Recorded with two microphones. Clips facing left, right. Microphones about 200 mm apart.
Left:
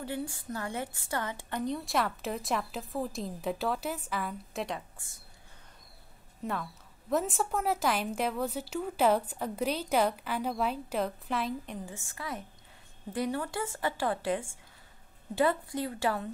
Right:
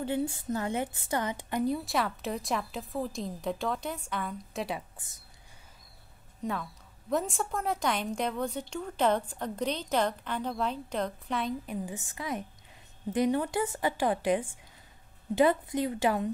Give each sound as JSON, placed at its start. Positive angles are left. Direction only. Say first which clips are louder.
{"t": 0.0, "sound": "a woman's voice", "louder": "right 5 dB", "side_deg": -25}
{"t": 1.6, "sound": "a woman's voice", "louder": "right 2 dB", "side_deg": -5}
{"t": 4.7, "sound": "a woman's voice", "louder": "right 1 dB", "side_deg": -20}
{"t": 6.4, "sound": "a woman's voice", "louder": "right 1 dB", "side_deg": 0}
{"t": 11.8, "sound": "a woman's voice", "louder": "right 4 dB", "side_deg": -15}